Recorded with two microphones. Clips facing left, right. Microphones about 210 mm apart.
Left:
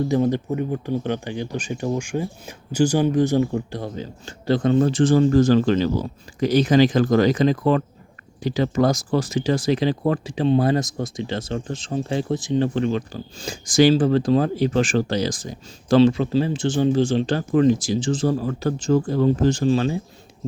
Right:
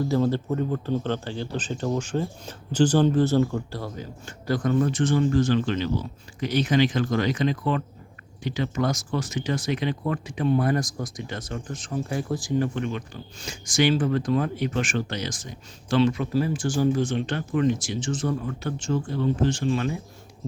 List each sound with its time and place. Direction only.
0.1 s speech: 15° left (ahead or behind)